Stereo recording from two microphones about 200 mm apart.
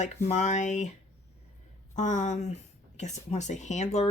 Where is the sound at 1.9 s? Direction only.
35° left (ahead or behind).